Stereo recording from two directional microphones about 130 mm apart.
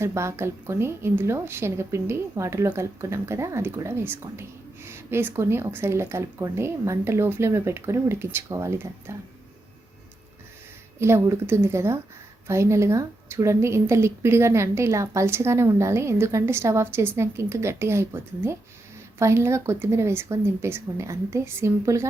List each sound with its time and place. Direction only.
0.0 s a woman's voice: 20° right (ahead or behind)
11.0 s a woman's voice: 20° right (ahead or behind)